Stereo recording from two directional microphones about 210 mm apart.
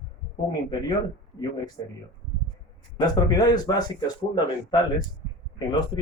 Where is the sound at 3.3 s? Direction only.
20° left (ahead or behind).